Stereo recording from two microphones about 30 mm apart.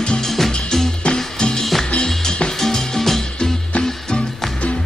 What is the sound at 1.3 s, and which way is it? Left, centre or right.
Music, left.